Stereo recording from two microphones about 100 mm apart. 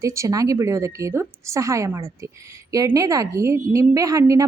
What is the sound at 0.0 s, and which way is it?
A woman's voice, 30° right (ahead or behind).